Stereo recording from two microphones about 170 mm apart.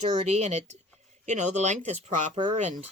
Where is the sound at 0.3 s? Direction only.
40° right (ahead or behind).